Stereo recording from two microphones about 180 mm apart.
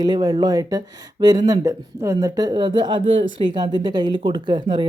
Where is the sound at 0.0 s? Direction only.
20° right (ahead or behind).